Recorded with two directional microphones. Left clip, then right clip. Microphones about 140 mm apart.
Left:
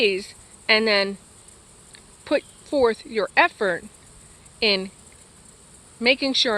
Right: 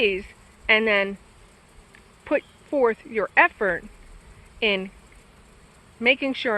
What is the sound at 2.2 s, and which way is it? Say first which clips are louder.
Speech: left 1 dB; 25° left (ahead or behind).